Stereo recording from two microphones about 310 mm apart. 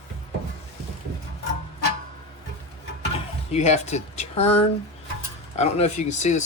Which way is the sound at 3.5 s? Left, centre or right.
Left.